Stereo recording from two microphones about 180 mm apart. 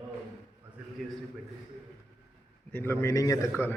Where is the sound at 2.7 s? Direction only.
10° left (ahead or behind).